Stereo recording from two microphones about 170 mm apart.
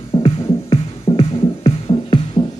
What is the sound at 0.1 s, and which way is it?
Music, 25° left (ahead or behind).